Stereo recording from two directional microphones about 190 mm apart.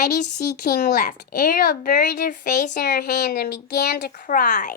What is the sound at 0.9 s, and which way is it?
Speech, 45° left (ahead or behind).